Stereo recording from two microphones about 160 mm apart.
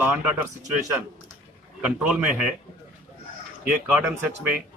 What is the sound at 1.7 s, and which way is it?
Speech, 5° right (ahead or behind).